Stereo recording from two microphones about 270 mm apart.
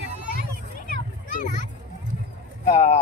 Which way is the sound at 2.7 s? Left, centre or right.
Left.